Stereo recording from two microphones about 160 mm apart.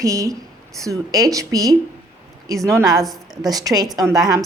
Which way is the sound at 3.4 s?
25° right (ahead or behind).